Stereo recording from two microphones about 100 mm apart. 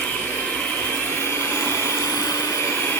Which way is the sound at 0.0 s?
15° left (ahead or behind).